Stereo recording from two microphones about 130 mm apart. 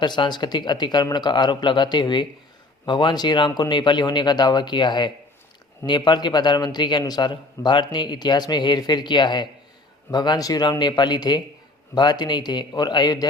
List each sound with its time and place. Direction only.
0.0 s a man's voice: 35° left (ahead or behind)